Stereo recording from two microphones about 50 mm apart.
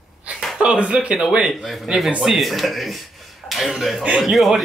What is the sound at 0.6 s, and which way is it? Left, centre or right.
Speech, right.